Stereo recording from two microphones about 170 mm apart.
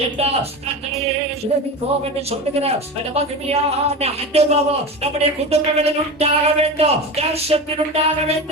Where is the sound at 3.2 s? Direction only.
35° right (ahead or behind).